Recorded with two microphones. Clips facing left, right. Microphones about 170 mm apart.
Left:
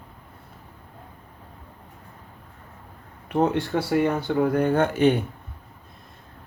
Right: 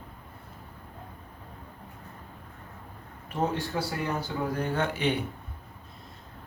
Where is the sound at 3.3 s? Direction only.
65° left (ahead or behind); by 5.2 s 45° left (ahead or behind).